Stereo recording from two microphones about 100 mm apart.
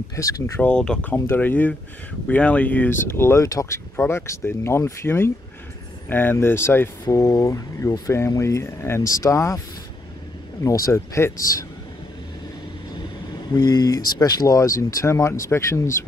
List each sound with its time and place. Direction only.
0.1 s speech: 30° left (ahead or behind)
0.6 s speech: 10° left (ahead or behind)
1.1 s speech: 20° left (ahead or behind)
7.2 s speech: 35° left (ahead or behind)
10.6 s speech: 30° left (ahead or behind)
13.5 s speech: 45° left (ahead or behind); by 16.1 s 30° left (ahead or behind)